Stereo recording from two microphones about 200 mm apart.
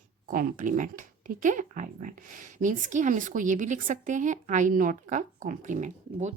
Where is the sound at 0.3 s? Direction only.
45° right (ahead or behind).